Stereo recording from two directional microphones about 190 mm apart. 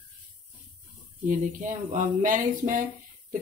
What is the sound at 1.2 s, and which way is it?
Speech, 40° right (ahead or behind).